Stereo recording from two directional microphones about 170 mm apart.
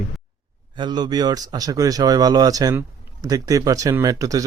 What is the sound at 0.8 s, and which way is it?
Speech, 25° right (ahead or behind).